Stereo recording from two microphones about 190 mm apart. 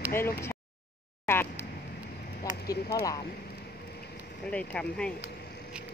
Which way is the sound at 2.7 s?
20° left (ahead or behind).